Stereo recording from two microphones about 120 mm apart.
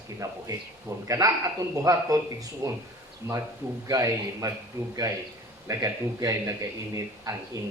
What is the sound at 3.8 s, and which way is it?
A man's voice, 30° right (ahead or behind).